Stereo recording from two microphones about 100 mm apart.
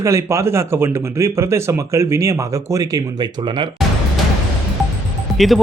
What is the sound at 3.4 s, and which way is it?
Speech, 50° right (ahead or behind).